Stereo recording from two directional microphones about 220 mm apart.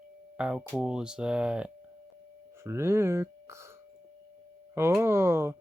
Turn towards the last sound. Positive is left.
turn(degrees=-10)  # may be behind; listen again after turning